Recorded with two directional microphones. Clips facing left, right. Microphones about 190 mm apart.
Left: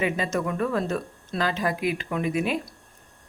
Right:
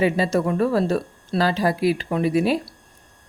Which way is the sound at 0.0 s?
35° right (ahead or behind).